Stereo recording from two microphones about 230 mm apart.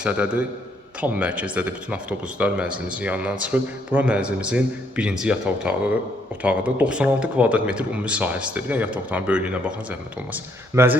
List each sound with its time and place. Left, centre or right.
0.0 s speech: centre